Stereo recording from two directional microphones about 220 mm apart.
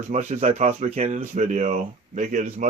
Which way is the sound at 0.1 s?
30° right (ahead or behind).